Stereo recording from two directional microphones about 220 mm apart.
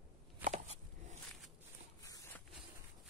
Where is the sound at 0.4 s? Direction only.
10° right (ahead or behind).